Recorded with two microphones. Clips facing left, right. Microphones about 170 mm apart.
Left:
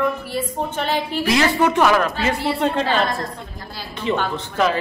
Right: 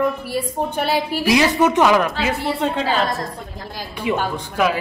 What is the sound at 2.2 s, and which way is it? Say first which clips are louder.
Speech: left 1 dB; 5° right (ahead or behind).